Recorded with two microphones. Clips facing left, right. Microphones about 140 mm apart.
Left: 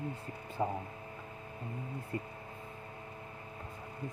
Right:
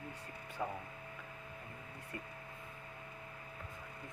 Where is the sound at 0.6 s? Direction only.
40° left (ahead or behind).